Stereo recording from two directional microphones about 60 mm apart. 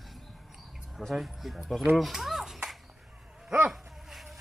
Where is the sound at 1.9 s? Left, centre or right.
Centre.